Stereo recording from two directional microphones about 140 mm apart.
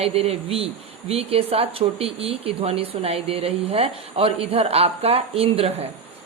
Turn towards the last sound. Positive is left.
turn(degrees=-45)  # may be behind; listen again after turning